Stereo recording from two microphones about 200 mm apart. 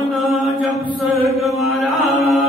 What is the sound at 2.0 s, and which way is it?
Chant, 35° left (ahead or behind).